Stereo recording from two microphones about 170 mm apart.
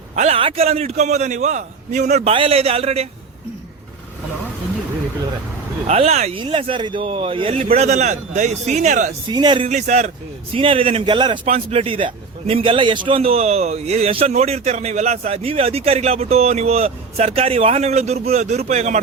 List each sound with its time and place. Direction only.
0.2 s a man's voice: 35° right (ahead or behind)
5.9 s a man's voice: 40° right (ahead or behind)
9.3 s speech: 25° right (ahead or behind)
9.6 s a man's voice: 45° right (ahead or behind); by 11.3 s 25° right (ahead or behind)
11.4 s a man's voice: 35° right (ahead or behind)